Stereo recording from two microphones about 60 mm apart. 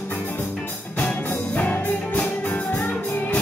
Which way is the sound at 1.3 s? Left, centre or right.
Left.